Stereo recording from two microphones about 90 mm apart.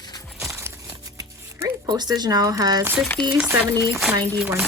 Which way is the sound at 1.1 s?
40° right (ahead or behind).